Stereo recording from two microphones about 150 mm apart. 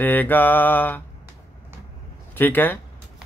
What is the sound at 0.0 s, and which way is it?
Mantra, 10° left (ahead or behind).